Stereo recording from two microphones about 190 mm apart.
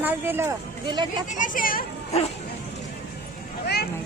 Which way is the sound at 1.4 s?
45° left (ahead or behind).